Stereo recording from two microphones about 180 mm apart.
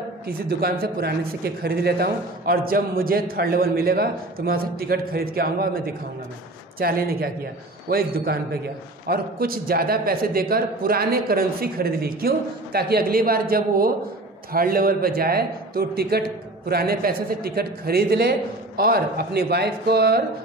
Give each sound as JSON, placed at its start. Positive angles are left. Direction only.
{"t": 0.3, "sound": "a man's voice", "side_deg": -60}